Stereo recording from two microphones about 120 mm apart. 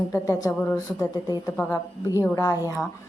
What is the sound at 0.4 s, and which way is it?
A woman's voice, 25° left (ahead or behind).